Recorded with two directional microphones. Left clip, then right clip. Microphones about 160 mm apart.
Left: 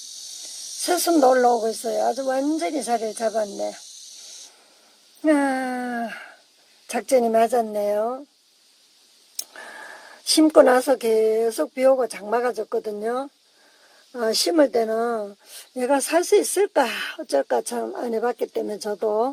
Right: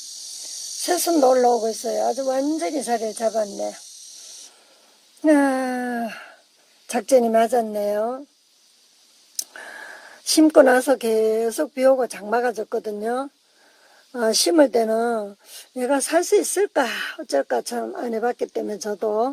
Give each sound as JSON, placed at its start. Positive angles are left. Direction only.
{"t": 0.9, "sound": "speech", "side_deg": -5}
{"t": 5.2, "sound": "speech", "side_deg": -20}
{"t": 9.5, "sound": "speech", "side_deg": -10}
{"t": 14.1, "sound": "speech", "side_deg": -20}
{"t": 15.7, "sound": "speech", "side_deg": -10}